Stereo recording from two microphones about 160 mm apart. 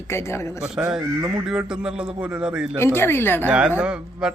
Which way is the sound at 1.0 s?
20° right (ahead or behind).